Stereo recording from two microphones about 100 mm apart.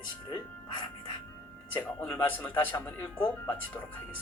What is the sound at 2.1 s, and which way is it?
Speech, 20° left (ahead or behind).